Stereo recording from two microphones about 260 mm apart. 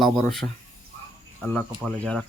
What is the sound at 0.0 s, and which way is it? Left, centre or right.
Speech, centre.